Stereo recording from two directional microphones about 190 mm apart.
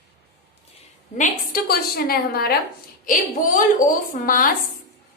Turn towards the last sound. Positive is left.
turn(degrees=45)  # may be behind; listen again after turning